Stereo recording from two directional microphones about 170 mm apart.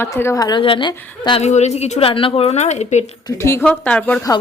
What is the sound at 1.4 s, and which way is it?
A woman's voice, 40° left (ahead or behind).